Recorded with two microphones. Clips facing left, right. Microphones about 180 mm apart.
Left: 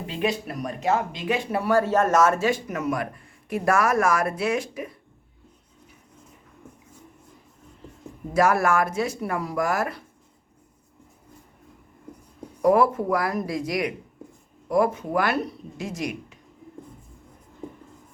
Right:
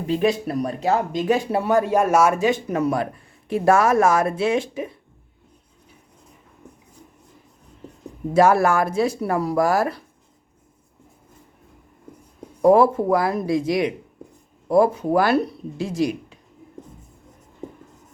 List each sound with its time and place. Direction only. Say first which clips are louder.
0.1 s speech: right 7 dB; 35° right (ahead or behind); by 2.6 s 15° right (ahead or behind)
2.6 s speech: right 5 dB; 30° right (ahead or behind)
8.3 s speech: right 4 dB; 30° right (ahead or behind)
12.6 s speech: right 4 dB; 25° right (ahead or behind)